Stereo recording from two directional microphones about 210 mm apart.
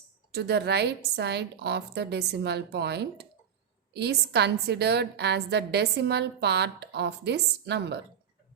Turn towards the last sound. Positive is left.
turn(degrees=-55)  # may be behind; listen again after turning